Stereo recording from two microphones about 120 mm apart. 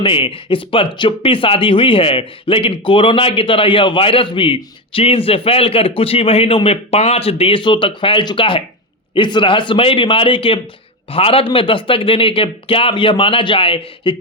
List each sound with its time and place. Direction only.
0.0 s speech: 45° left (ahead or behind)